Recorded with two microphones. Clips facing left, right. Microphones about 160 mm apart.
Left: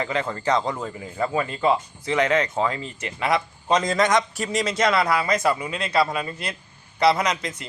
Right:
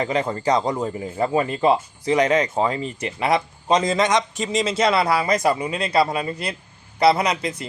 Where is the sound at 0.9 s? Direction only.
30° right (ahead or behind).